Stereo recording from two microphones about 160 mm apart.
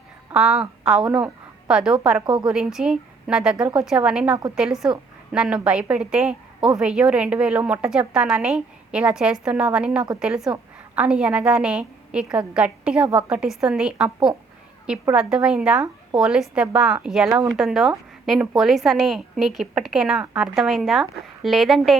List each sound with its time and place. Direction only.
0.3 s a woman's voice: 5° right (ahead or behind)
2.2 s a woman's voice: 30° right (ahead or behind)
2.5 s a woman's voice: 5° right (ahead or behind)